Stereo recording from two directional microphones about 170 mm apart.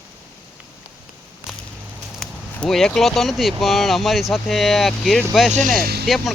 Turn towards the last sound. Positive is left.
turn(degrees=-70)  # may be behind; listen again after turning